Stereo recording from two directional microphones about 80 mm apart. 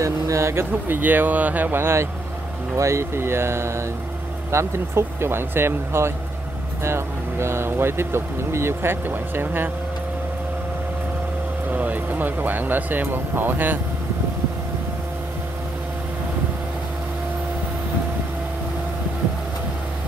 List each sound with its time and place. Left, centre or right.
0.0 s speech: right
11.7 s speech: right